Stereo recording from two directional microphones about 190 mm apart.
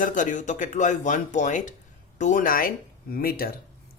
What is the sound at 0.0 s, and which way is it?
Speech, 40° left (ahead or behind).